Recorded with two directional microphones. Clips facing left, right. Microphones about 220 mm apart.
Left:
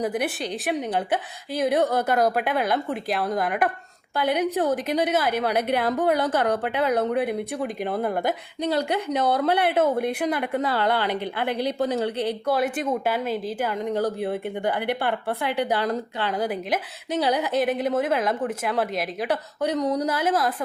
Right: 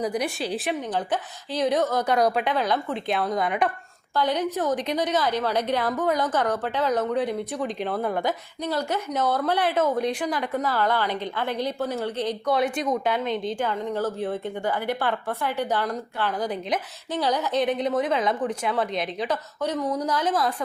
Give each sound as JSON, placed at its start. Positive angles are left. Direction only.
{"t": 0.0, "sound": "a woman's voice", "side_deg": 0}